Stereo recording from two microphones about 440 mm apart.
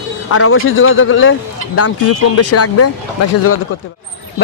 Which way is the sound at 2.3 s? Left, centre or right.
Left.